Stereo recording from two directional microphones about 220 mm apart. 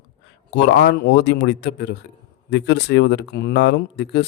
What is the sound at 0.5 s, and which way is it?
Speech, 50° left (ahead or behind).